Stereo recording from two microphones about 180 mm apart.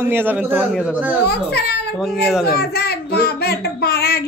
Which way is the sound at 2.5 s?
60° left (ahead or behind).